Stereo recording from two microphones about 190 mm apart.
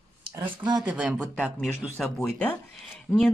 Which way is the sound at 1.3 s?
5° left (ahead or behind).